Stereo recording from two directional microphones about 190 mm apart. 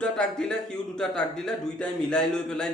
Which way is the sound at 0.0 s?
5° left (ahead or behind).